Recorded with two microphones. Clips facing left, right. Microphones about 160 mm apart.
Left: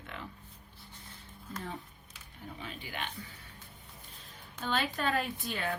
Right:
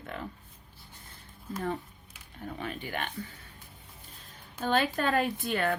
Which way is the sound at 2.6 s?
55° right (ahead or behind).